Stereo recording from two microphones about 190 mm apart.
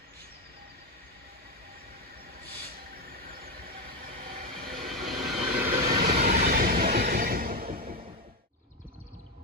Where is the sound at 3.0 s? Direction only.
55° right (ahead or behind).